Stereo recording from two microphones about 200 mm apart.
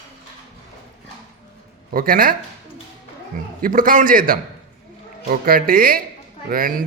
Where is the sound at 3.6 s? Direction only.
45° right (ahead or behind).